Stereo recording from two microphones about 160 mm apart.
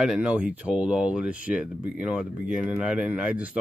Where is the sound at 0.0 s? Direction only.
5° right (ahead or behind).